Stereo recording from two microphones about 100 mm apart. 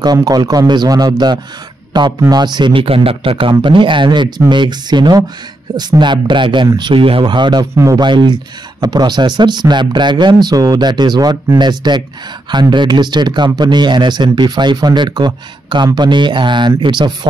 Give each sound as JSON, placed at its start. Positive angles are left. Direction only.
{"t": 0.0, "sound": "a man's voice", "side_deg": -40}
{"t": 7.7, "sound": "speech", "side_deg": -35}
{"t": 8.0, "sound": "a man's voice", "side_deg": -50}